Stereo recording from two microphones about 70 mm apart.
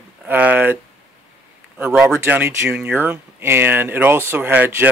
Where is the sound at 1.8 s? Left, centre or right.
Centre.